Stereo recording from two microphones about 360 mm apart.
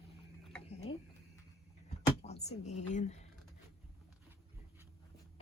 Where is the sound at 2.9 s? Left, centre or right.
Centre.